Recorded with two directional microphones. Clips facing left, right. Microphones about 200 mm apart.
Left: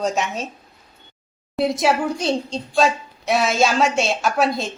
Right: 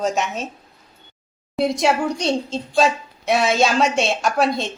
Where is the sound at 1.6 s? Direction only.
Centre (ahead or behind).